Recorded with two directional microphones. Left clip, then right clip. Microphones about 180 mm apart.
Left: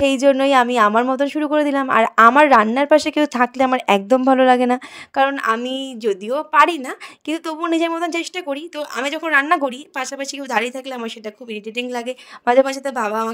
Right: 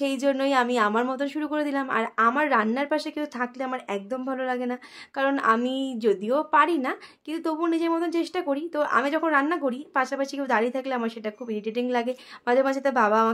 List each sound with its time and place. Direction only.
0.0 s a woman's voice: 40° left (ahead or behind)